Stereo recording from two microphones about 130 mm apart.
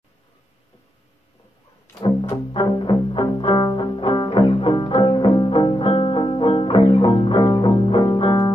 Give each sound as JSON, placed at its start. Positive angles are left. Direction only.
{"t": 2.6, "sound": "music", "side_deg": 35}